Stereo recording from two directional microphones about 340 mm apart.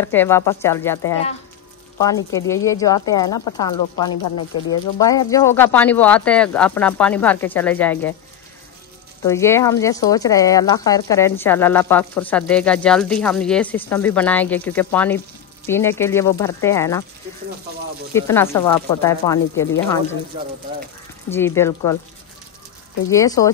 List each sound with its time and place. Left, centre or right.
0.0 s speech: centre
2.3 s speech: centre
3.3 s speech: left
3.5 s speech: centre
9.2 s speech: centre
18.1 s speech: centre
21.3 s speech: centre
23.0 s speech: centre